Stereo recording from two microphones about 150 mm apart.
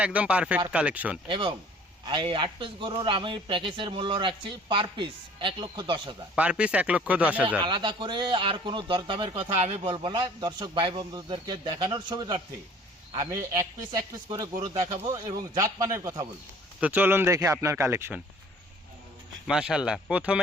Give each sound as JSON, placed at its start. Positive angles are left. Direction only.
{"t": 0.0, "sound": "speech", "side_deg": -10}
{"t": 1.3, "sound": "speech", "side_deg": -35}
{"t": 6.3, "sound": "speech", "side_deg": -10}
{"t": 7.6, "sound": "a man's voice", "side_deg": -35}
{"t": 19.5, "sound": "speech", "side_deg": -5}